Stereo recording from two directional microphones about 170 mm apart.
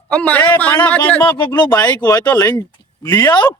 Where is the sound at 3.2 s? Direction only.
25° left (ahead or behind).